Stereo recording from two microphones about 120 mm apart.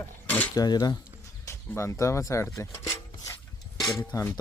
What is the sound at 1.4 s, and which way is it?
Rub, 25° left (ahead or behind).